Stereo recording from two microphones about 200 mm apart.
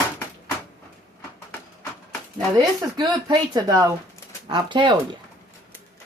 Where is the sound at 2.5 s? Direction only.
20° right (ahead or behind).